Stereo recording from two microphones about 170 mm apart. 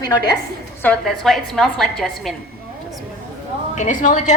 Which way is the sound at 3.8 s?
50° left (ahead or behind).